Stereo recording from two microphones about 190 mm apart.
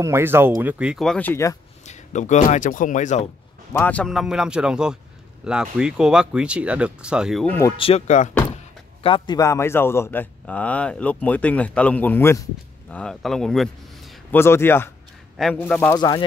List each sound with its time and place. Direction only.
0.0 s speech: 15° right (ahead or behind); by 1.6 s 15° left (ahead or behind)
1.9 s speech: 40° left (ahead or behind)
3.7 s speech: 5° left (ahead or behind)
7.4 s speech: 10° left (ahead or behind)
7.7 s speech: 30° left (ahead or behind)
9.0 s speech: 25° left (ahead or behind); by 13.7 s centre (ahead or behind)
14.3 s speech: 15° left (ahead or behind)
16.0 s speech: 20° left (ahead or behind)